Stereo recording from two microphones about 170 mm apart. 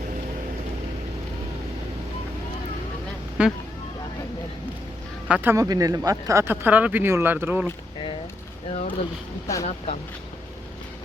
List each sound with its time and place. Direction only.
3.4 s speech: 5° right (ahead or behind)
5.3 s speech: 10° right (ahead or behind)
8.7 s speech: 40° left (ahead or behind)